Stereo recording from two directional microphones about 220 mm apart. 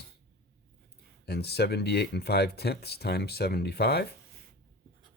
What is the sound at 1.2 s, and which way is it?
Speech, 45° left (ahead or behind).